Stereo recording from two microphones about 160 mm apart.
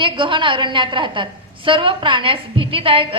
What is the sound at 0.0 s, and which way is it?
A woman's voice, 30° right (ahead or behind).